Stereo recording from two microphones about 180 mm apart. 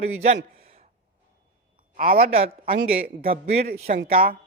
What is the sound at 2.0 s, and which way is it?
Speech, 55° right (ahead or behind).